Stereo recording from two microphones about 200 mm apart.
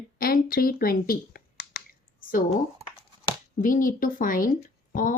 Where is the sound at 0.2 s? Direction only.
45° left (ahead or behind).